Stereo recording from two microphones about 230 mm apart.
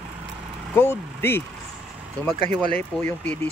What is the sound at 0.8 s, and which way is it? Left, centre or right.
Speech, centre.